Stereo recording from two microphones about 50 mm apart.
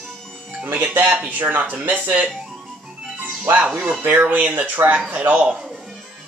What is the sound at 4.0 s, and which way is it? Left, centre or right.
Speech, right.